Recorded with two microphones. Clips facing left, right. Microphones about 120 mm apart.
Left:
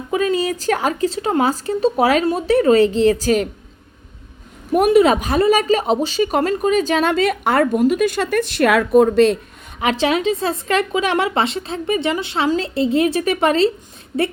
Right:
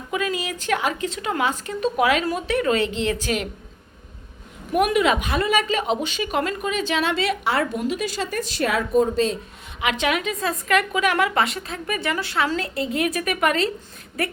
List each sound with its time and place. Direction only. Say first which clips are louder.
0.1 s a woman's voice: left 7 dB; 35° left (ahead or behind)
4.7 s speech: left 6 dB; 35° left (ahead or behind); by 9.4 s 65° left (ahead or behind)
9.8 s a woman's voice: left 6 dB; 35° left (ahead or behind)